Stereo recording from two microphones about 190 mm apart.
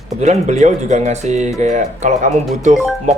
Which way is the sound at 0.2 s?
35° right (ahead or behind).